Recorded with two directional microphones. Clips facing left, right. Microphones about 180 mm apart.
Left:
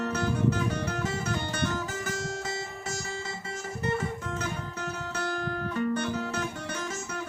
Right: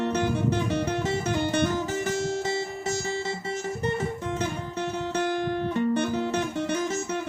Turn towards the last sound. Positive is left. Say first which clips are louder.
# right 4 dB
turn(degrees=-30)  # may be behind; listen again after turning